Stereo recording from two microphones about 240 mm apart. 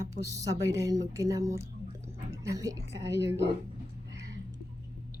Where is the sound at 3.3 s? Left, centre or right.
Right.